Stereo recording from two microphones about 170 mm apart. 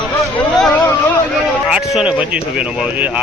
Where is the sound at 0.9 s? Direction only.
10° left (ahead or behind).